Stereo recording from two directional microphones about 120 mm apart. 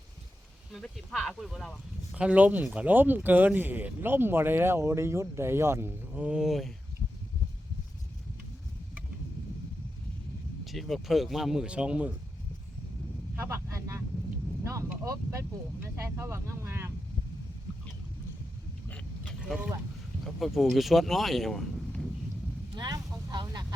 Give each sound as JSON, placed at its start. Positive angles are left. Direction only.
{"t": 0.7, "sound": "speech", "side_deg": 5}
{"t": 2.1, "sound": "speech", "side_deg": -10}
{"t": 6.2, "sound": "speech", "side_deg": -5}
{"t": 10.7, "sound": "speech", "side_deg": 0}
{"t": 13.3, "sound": "vehicle", "side_deg": -20}
{"t": 14.6, "sound": "a sound", "side_deg": -25}
{"t": 15.0, "sound": "speech", "side_deg": -25}
{"t": 19.2, "sound": "a sound", "side_deg": -5}
{"t": 20.2, "sound": "speech", "side_deg": 0}
{"t": 22.7, "sound": "a sound", "side_deg": -35}
{"t": 23.3, "sound": "vehicle", "side_deg": -35}